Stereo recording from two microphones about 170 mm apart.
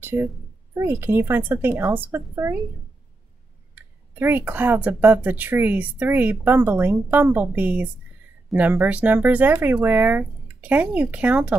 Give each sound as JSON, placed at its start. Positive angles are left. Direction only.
{"t": 0.0, "sound": "speech", "side_deg": -15}
{"t": 3.7, "sound": "speech", "side_deg": -10}